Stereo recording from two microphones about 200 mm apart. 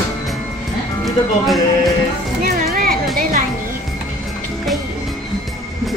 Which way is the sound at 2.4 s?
45° right (ahead or behind).